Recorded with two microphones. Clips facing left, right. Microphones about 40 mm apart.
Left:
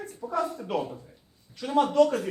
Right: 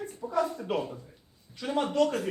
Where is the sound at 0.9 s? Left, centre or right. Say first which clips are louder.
Left 1 dB; centre.